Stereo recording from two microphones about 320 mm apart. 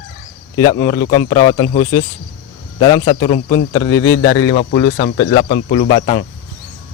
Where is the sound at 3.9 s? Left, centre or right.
Left.